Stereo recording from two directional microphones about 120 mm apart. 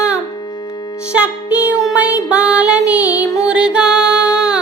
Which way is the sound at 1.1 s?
10° right (ahead or behind).